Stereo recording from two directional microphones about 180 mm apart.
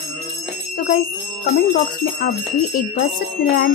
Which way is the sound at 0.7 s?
45° left (ahead or behind).